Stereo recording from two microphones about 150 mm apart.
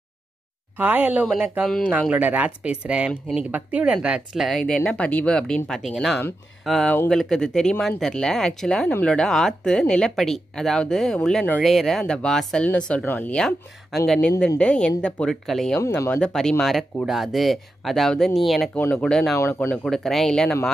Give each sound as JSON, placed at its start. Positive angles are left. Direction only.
{"t": 0.7, "sound": "speech", "side_deg": -10}
{"t": 18.8, "sound": "speech", "side_deg": 10}
{"t": 19.3, "sound": "speech", "side_deg": 15}
{"t": 19.8, "sound": "speech", "side_deg": 0}